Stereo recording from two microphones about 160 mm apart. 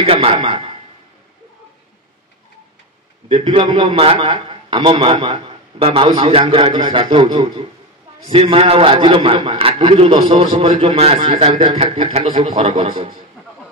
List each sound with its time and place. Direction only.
0.0 s a man's voice: 40° right (ahead or behind)
3.4 s a man's voice: 30° right (ahead or behind)